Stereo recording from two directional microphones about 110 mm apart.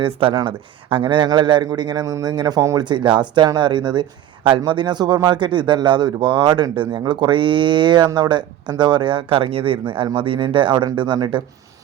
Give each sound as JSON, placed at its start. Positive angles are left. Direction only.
{"t": 0.0, "sound": "a man's voice", "side_deg": -50}
{"t": 2.8, "sound": "a man's voice", "side_deg": -45}